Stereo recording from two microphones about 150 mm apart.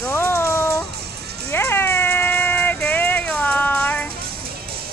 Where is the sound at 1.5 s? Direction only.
15° left (ahead or behind).